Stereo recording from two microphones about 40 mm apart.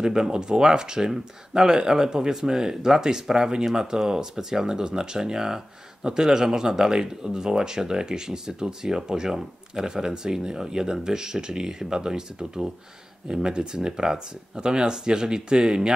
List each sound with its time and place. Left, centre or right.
0.0 s speech: centre